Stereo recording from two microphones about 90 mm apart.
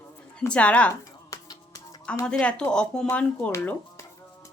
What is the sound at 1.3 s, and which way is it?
Finger snapping, 45° left (ahead or behind).